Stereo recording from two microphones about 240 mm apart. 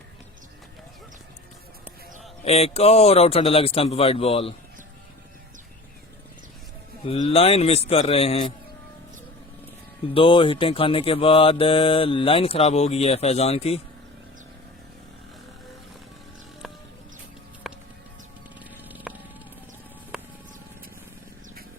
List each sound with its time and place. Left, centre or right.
2.4 s mantra: left
7.0 s mantra: left
10.2 s mantra: left
17.7 s music: centre
18.9 s music: centre
20.1 s a sound: centre